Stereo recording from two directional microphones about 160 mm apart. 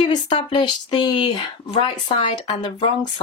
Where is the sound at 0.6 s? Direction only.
30° left (ahead or behind).